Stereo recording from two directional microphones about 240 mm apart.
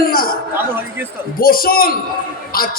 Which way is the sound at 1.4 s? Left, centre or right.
Left.